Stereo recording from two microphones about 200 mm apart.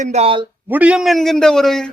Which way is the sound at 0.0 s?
30° right (ahead or behind).